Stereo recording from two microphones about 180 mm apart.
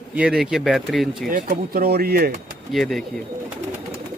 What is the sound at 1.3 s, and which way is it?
Speech, 55° right (ahead or behind).